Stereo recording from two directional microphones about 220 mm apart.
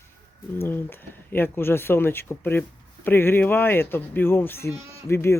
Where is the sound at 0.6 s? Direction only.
10° left (ahead or behind).